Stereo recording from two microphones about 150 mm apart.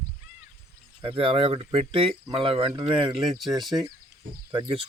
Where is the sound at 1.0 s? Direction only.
35° right (ahead or behind).